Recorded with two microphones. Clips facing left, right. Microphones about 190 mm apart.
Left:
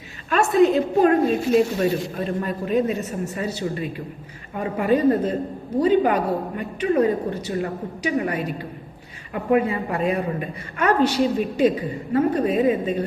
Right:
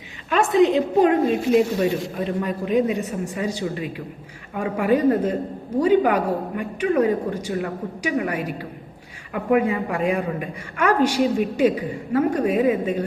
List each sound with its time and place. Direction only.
0.5 s a woman's voice: 20° right (ahead or behind)